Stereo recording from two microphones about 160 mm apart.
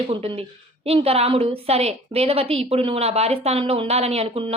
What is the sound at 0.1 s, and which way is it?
A woman's voice, 35° right (ahead or behind).